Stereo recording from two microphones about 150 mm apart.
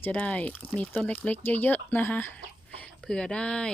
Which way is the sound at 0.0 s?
10° left (ahead or behind).